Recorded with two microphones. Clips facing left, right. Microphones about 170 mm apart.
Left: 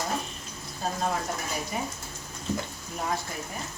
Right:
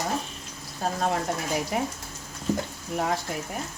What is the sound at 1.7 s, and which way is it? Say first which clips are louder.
Speech: right 4 dB; 75° right (ahead or behind).